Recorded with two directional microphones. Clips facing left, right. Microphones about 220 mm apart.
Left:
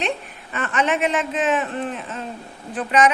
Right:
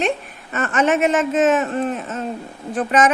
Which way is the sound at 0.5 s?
45° right (ahead or behind).